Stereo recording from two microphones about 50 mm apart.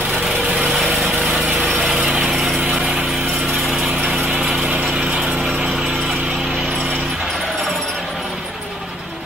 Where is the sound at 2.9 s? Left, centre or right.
Centre.